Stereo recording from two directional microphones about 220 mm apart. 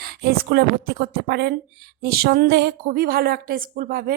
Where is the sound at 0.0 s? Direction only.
45° right (ahead or behind).